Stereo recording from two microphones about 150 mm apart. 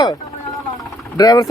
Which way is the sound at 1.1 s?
25° left (ahead or behind).